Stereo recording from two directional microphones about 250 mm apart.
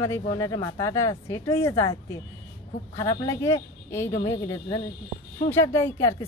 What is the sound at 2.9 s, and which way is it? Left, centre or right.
Speech, centre.